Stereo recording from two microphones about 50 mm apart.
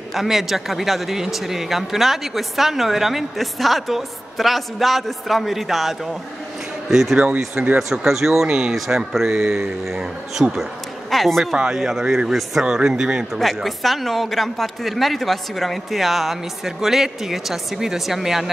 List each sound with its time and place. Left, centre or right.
0.1 s speech: centre
7.6 s speech: right
7.9 s a man's voice: centre
13.3 s speech: centre